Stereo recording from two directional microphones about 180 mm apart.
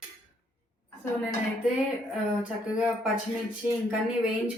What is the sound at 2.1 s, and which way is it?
Speech, 5° right (ahead or behind).